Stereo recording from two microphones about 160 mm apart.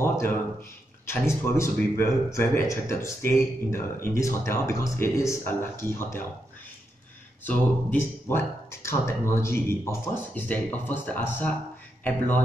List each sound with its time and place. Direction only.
0.0 s a sound: 15° left (ahead or behind)
1.0 s speech: 15° left (ahead or behind)
7.4 s speech: 10° left (ahead or behind)